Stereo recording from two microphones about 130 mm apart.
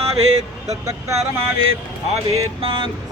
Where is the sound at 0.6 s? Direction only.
25° right (ahead or behind).